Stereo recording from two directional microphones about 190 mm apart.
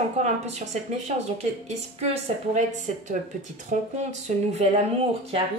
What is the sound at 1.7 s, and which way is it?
Speech, 35° right (ahead or behind).